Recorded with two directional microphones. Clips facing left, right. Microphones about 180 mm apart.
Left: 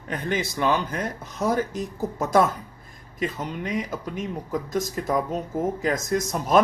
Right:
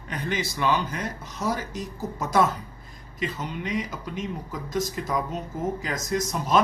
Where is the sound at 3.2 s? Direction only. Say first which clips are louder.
Left 2 dB; 50° left (ahead or behind).